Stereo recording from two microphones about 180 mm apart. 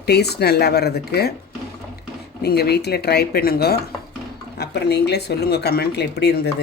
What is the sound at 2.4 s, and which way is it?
Speech, 60° left (ahead or behind).